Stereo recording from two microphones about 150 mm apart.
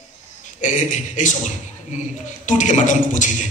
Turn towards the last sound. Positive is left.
turn(degrees=55)  # may be behind; listen again after turning